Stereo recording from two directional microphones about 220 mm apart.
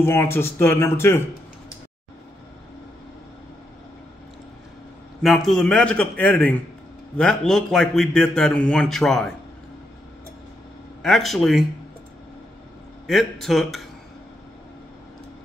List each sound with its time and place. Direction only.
0.0 s speech: 10° left (ahead or behind)
5.2 s a man's voice: centre (ahead or behind)
11.0 s a man's voice: centre (ahead or behind)
13.0 s a man's voice: centre (ahead or behind)